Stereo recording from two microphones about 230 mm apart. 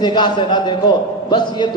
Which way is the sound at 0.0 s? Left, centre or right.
Centre.